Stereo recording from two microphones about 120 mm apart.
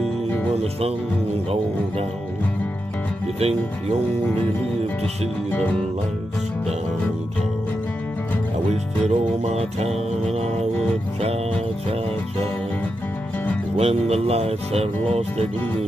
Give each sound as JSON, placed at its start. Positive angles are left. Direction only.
{"t": 0.6, "sound": "speech", "side_deg": -60}
{"t": 8.6, "sound": "music", "side_deg": -65}
{"t": 13.7, "sound": "speech", "side_deg": -60}